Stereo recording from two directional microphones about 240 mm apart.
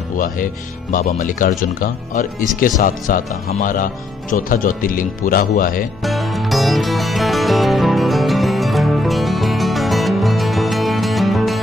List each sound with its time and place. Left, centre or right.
0.9 s speech: left
6.0 s music: centre